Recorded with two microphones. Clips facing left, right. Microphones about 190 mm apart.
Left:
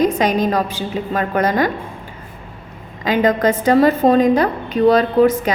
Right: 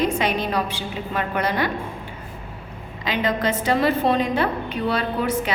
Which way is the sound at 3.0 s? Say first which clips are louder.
Left 7 dB; 45° left (ahead or behind).